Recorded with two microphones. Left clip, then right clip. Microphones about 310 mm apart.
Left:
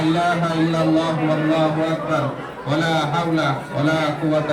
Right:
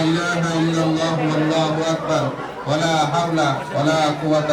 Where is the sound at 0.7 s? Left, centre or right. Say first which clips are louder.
Left 1 dB; centre.